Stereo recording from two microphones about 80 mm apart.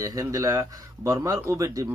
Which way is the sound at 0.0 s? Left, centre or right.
Right.